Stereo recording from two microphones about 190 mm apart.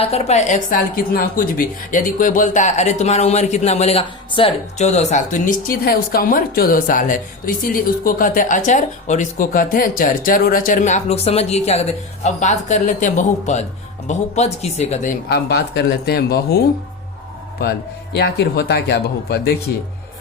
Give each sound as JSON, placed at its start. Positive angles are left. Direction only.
{"t": 0.0, "sound": "a woman's voice", "side_deg": 35}
{"t": 15.4, "sound": "speech", "side_deg": 60}
{"t": 18.1, "sound": "speech", "side_deg": 55}